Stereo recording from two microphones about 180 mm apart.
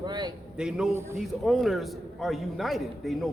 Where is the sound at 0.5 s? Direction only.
5° right (ahead or behind).